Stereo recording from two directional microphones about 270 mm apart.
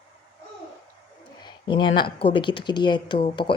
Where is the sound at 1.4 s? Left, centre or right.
Centre.